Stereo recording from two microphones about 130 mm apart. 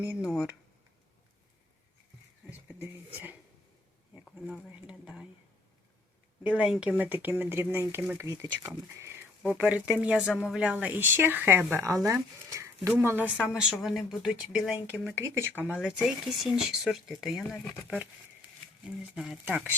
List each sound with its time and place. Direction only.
0.2 s speech: 5° right (ahead or behind)
2.6 s speech: 15° right (ahead or behind)
4.4 s speech: 10° right (ahead or behind)
6.4 s speech: 10° right (ahead or behind)
12.0 s a sound: 25° right (ahead or behind)
13.0 s speech: 15° right (ahead or behind)
15.1 s speech: 20° right (ahead or behind)
15.8 s speech: 5° right (ahead or behind)
18.4 s a sound: 10° right (ahead or behind)
18.9 s speech: 5° right (ahead or behind)